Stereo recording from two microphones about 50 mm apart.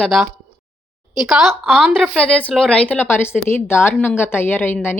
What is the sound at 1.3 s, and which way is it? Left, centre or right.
Speech, centre.